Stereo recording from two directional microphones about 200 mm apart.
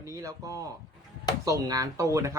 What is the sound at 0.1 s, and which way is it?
Speech, 15° right (ahead or behind).